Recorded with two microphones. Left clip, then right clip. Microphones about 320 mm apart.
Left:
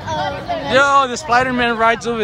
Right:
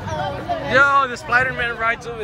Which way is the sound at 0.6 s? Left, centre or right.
Centre.